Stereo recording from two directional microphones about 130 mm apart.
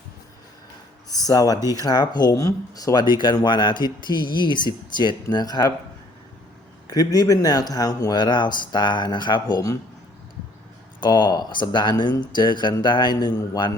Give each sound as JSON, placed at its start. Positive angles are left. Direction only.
{"t": 1.1, "sound": "speech", "side_deg": 30}
{"t": 6.8, "sound": "speech", "side_deg": 30}
{"t": 11.0, "sound": "speech", "side_deg": 35}